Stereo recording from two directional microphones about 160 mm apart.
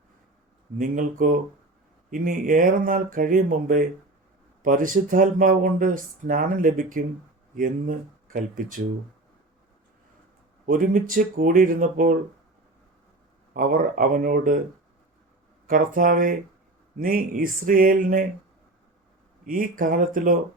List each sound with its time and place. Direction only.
0.8 s speech: 55° right (ahead or behind)
10.7 s speech: 60° right (ahead or behind)
13.5 s speech: 60° right (ahead or behind)
15.6 s speech: 60° right (ahead or behind)
19.5 s speech: 60° right (ahead or behind)